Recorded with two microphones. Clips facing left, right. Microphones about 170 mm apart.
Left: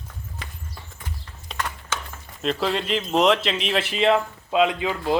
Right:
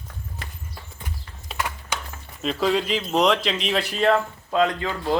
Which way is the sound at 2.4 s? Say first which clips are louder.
Right 2 dB; centre (ahead or behind).